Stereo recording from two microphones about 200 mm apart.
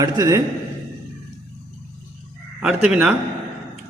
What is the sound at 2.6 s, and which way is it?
Speech, 5° right (ahead or behind).